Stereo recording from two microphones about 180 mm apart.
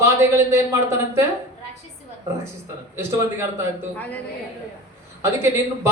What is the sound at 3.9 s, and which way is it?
Speech, 10° left (ahead or behind).